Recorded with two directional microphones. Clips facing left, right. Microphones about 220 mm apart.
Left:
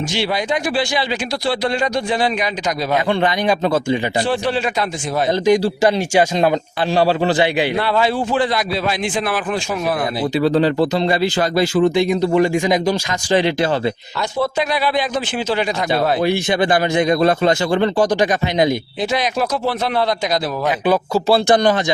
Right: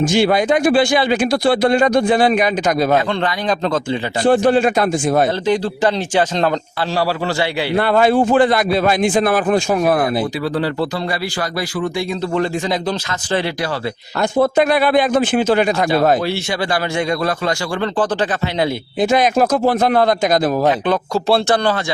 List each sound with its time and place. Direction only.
0.1 s speech: 50° right (ahead or behind)
3.1 s speech: 10° left (ahead or behind)
4.2 s speech: 50° right (ahead or behind)
5.5 s speech: 10° left (ahead or behind)
7.8 s speech: 50° right (ahead or behind)
10.4 s speech: 20° left (ahead or behind)
14.2 s speech: 50° right (ahead or behind)
16.2 s speech: 20° left (ahead or behind)
19.1 s speech: 50° right (ahead or behind)
20.8 s speech: 5° left (ahead or behind)
21.4 s speech: 15° left (ahead or behind)